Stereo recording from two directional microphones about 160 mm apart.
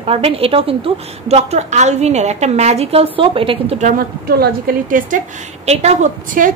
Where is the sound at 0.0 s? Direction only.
35° right (ahead or behind); by 5.2 s 55° right (ahead or behind).